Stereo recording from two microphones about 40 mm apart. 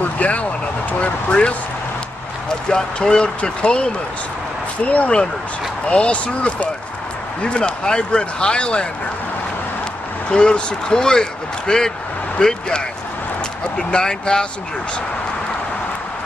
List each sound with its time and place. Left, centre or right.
0.0 s vehicle: left
1.0 s speech: left
2.7 s speech: left
4.8 s speech: left
10.3 s speech: left